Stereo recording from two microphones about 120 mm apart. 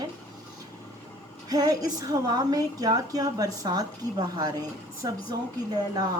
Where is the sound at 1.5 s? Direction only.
30° right (ahead or behind).